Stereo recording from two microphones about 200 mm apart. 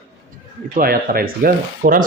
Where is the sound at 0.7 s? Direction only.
45° right (ahead or behind).